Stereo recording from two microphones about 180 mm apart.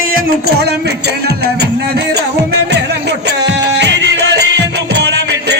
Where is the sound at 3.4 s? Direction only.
75° right (ahead or behind).